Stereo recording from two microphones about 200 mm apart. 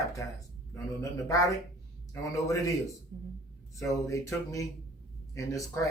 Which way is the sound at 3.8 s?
15° left (ahead or behind).